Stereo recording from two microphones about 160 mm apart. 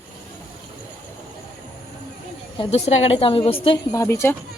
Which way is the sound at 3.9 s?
15° left (ahead or behind).